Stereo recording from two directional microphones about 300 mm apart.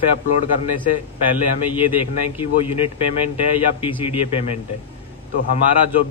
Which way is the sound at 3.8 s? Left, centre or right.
Centre.